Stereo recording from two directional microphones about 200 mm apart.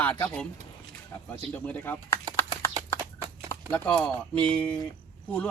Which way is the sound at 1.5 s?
10° left (ahead or behind).